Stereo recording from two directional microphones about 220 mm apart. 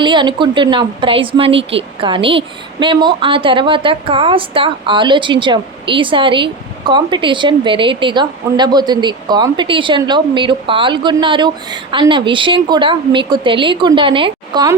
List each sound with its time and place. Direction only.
0.0 s a woman's voice: 20° right (ahead or behind)